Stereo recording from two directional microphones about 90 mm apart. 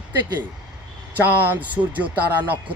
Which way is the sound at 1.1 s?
20° right (ahead or behind).